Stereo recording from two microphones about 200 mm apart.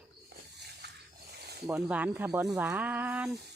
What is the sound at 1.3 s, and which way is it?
Snake, 55° right (ahead or behind).